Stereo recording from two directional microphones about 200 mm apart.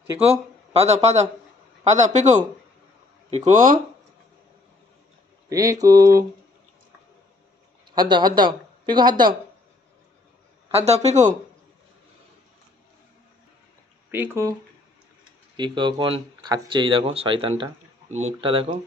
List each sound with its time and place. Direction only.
0.7 s speech: 35° right (ahead or behind)
5.5 s mantra: 15° right (ahead or behind)
7.9 s speech: 20° right (ahead or behind)
10.8 s speech: 30° right (ahead or behind)
14.1 s mantra: 10° right (ahead or behind)
15.5 s speech: 25° right (ahead or behind)